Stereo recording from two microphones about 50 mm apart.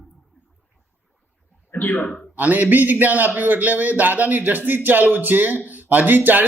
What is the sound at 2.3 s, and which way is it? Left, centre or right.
Speech, right.